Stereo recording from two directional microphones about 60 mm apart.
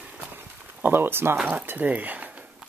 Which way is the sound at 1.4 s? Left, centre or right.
Right.